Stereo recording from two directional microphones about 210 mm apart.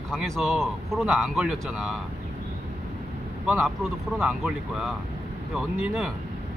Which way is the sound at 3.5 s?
Centre (ahead or behind).